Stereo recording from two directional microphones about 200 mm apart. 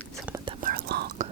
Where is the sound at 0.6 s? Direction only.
50° right (ahead or behind).